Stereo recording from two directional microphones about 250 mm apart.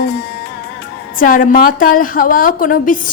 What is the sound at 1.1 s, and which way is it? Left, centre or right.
A woman's voice, left.